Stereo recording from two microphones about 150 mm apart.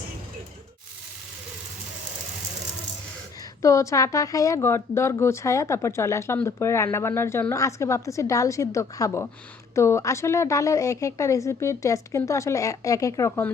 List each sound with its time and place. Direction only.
3.6 s speech: 20° left (ahead or behind)